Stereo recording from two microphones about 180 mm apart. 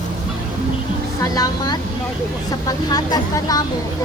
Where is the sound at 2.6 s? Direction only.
20° left (ahead or behind).